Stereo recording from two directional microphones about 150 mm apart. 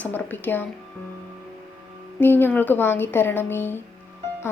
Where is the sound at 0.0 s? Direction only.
10° left (ahead or behind).